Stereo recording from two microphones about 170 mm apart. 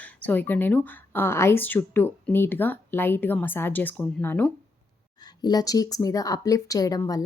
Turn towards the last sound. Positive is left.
turn(degrees=20)  # may be behind; listen again after turning